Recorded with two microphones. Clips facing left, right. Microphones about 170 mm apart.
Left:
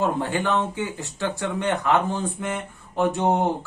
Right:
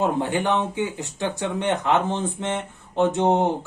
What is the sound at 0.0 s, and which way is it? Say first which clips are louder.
Speech: right 1 dB; 20° right (ahead or behind).